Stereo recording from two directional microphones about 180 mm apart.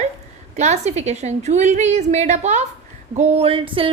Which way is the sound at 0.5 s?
40° right (ahead or behind).